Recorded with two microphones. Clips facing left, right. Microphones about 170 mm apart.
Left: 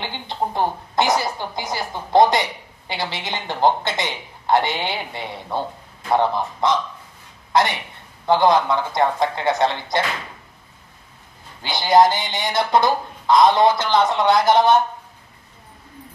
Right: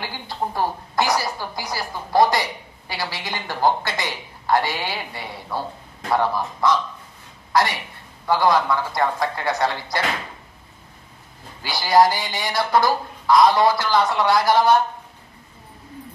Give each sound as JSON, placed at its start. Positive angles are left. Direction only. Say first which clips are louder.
{"t": 0.0, "sound": "speech", "louder": "left 2 dB", "side_deg": 20}
{"t": 11.6, "sound": "speech", "louder": "left 2 dB", "side_deg": 20}